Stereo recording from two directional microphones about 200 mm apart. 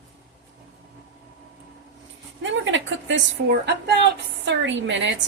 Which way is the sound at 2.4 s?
70° right (ahead or behind).